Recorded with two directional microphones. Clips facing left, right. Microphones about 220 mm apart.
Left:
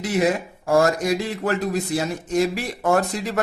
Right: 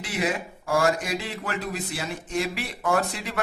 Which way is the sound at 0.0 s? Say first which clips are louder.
Left 7 dB; 40° left (ahead or behind).